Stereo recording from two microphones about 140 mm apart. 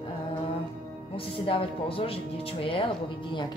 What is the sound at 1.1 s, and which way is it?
A woman's voice, 40° left (ahead or behind).